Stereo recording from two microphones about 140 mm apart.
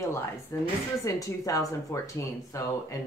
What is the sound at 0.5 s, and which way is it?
Speech, 20° left (ahead or behind).